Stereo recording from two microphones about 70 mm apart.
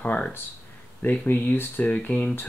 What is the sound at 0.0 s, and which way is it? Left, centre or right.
Speech, left.